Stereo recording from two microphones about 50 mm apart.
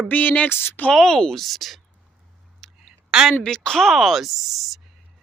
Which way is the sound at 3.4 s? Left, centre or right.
Centre.